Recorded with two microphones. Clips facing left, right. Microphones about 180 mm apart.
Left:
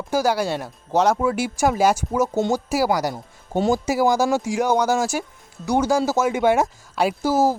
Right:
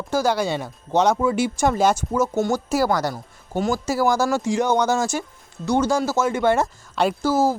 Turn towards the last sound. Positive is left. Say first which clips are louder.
# even
turn(degrees=15)  # may be behind; listen again after turning